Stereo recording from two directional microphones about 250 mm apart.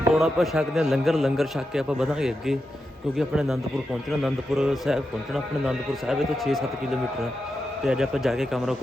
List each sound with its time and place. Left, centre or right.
0.1 s a man's voice: centre
7.9 s a man's voice: centre